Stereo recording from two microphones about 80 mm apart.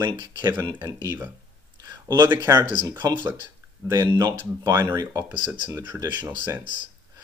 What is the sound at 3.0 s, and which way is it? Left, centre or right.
Speech, right.